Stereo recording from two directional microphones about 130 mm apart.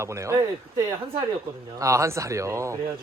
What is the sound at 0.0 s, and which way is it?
Speech, 25° right (ahead or behind).